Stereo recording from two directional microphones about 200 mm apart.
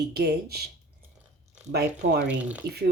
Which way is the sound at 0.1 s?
55° right (ahead or behind).